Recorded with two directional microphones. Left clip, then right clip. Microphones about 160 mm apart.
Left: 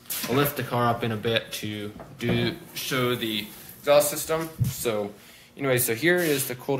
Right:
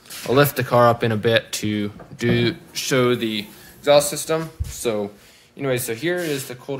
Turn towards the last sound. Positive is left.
turn(degrees=5)  # may be behind; listen again after turning